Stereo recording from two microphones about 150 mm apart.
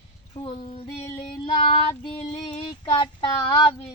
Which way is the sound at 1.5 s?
40° left (ahead or behind).